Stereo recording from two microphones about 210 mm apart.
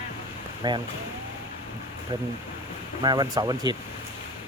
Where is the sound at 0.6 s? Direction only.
20° right (ahead or behind).